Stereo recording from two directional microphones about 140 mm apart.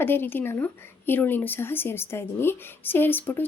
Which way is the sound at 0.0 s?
15° left (ahead or behind).